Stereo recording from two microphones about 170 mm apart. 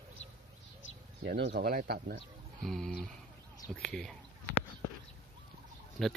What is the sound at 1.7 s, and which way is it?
Speech, 60° right (ahead or behind).